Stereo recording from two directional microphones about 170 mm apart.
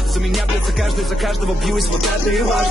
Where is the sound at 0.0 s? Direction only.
Centre (ahead or behind).